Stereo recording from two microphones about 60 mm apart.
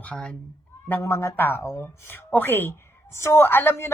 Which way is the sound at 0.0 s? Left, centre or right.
Left.